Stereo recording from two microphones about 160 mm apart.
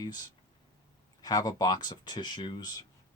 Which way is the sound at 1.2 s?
25° left (ahead or behind).